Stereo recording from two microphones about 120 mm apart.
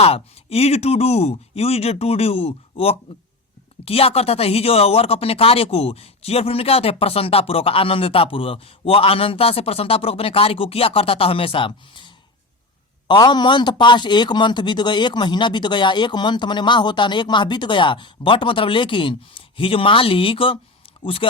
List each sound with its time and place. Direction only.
0.0 s a man's voice: 55° left (ahead or behind)